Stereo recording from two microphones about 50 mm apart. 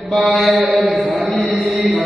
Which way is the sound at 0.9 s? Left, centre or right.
Centre.